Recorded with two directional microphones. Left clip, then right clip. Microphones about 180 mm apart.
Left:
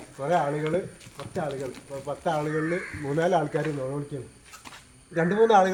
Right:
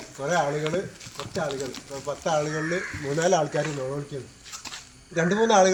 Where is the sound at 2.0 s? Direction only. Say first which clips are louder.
Right 2 dB; 15° left (ahead or behind).